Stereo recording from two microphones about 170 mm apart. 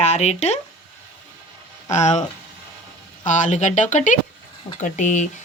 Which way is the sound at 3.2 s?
45° left (ahead or behind).